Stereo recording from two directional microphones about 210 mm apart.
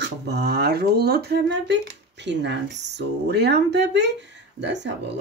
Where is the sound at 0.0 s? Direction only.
50° right (ahead or behind).